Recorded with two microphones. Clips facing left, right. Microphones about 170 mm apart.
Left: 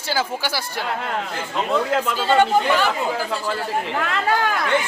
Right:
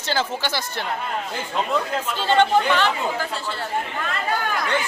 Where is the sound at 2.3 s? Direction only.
10° left (ahead or behind).